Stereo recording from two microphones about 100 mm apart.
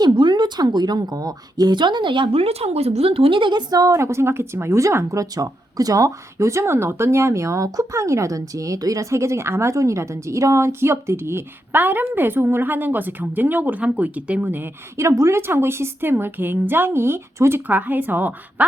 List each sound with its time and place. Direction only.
0.0 s a woman's voice: 50° right (ahead or behind); by 18.6 s 20° right (ahead or behind)